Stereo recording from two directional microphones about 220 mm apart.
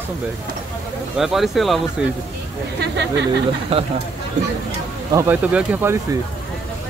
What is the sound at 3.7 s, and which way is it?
Speech, 25° right (ahead or behind).